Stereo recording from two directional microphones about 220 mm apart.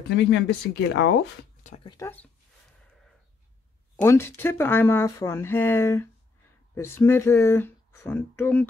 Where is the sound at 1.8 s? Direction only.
15° left (ahead or behind).